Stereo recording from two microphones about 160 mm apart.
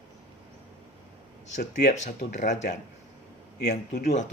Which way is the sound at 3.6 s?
90° left.